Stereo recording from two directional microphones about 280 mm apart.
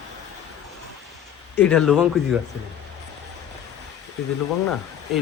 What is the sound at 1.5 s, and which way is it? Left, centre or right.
Speech, centre.